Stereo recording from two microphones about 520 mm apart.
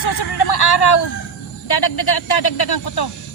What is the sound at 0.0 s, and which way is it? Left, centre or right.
Vehicle, left.